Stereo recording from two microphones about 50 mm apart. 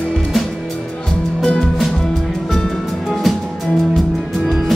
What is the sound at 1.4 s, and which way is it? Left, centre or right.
Music, centre.